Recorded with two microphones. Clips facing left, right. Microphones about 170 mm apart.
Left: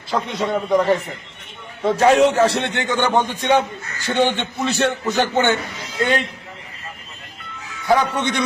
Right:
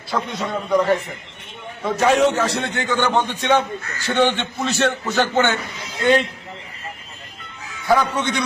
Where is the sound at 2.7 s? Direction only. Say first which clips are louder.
Left 1 dB; 15° left (ahead or behind).